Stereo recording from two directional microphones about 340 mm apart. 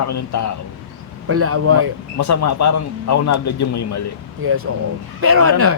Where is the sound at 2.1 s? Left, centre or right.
Left.